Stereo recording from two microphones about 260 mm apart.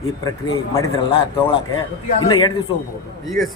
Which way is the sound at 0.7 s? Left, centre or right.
Centre.